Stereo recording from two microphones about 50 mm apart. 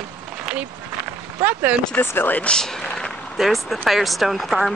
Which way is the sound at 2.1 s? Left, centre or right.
Left.